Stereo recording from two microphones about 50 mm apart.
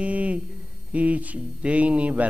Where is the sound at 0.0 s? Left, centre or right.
Right.